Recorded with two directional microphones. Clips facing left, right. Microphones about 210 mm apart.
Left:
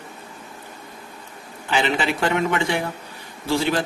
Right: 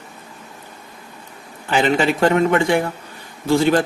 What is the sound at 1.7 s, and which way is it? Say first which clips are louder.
A man's voice: right 5 dB; 45° right (ahead or behind).